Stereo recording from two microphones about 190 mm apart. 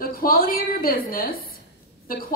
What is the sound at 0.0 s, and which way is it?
A woman's voice, 50° left (ahead or behind).